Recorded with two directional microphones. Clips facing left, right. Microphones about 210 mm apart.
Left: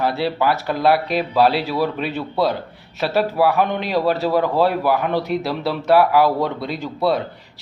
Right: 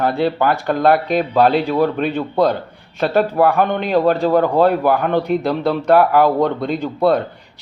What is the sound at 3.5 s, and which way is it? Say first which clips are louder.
Speech: right 2 dB; 50° right (ahead or behind).